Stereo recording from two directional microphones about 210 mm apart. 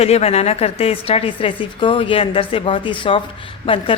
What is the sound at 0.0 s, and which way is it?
A woman's voice, 30° left (ahead or behind).